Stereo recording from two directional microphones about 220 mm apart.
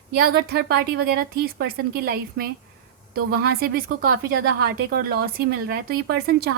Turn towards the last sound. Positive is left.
turn(degrees=-45)  # may be behind; listen again after turning